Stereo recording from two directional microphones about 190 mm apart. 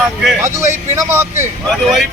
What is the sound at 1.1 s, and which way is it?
Speech, 10° right (ahead or behind).